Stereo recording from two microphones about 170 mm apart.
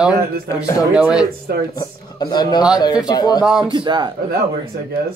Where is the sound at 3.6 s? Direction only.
25° right (ahead or behind).